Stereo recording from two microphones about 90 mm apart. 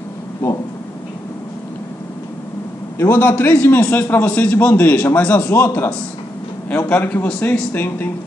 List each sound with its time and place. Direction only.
3.0 s a man's voice: 25° left (ahead or behind)
6.9 s a man's voice: 20° left (ahead or behind)
7.7 s a man's voice: 20° left (ahead or behind)